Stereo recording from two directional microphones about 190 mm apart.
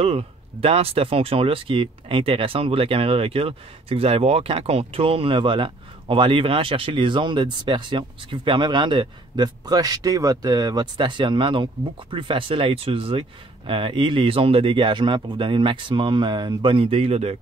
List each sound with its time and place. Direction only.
0.0 s speech: 30° right (ahead or behind)